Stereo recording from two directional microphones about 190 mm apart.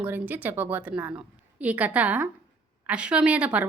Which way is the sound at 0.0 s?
10° right (ahead or behind).